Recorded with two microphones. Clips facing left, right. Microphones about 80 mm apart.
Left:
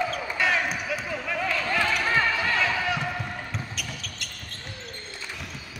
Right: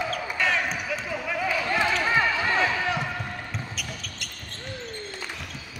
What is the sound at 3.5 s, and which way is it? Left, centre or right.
Basketball bounce, centre.